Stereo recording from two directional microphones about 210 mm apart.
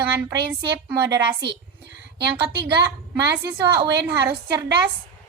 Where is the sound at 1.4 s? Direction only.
55° right (ahead or behind).